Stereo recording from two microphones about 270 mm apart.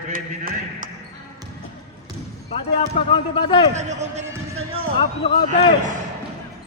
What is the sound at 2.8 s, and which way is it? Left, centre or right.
Speech, centre.